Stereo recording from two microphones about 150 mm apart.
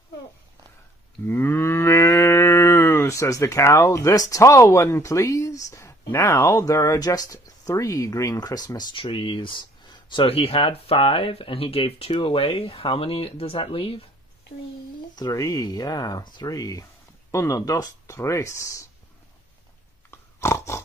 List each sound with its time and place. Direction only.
1.2 s livestock: 15° left (ahead or behind); by 14.0 s 35° left (ahead or behind)
15.1 s speech: 25° left (ahead or behind)
20.1 s dog: 15° left (ahead or behind)